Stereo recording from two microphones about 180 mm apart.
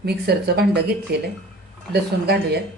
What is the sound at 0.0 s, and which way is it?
A woman's voice, 60° right (ahead or behind).